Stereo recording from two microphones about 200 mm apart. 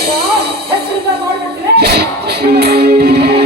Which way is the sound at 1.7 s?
50° right (ahead or behind).